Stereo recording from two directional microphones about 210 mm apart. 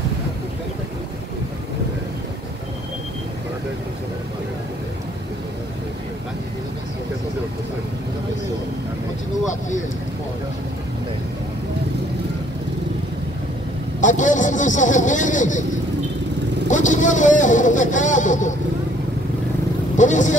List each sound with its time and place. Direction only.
14.0 s a sound: 35° left (ahead or behind)
16.6 s vehicle: 35° left (ahead or behind)
20.0 s vehicle: 35° left (ahead or behind)